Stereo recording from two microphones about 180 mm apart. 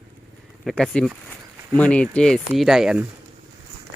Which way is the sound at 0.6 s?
Centre (ahead or behind).